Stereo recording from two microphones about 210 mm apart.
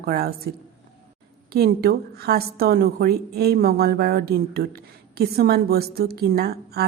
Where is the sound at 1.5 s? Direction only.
50° right (ahead or behind).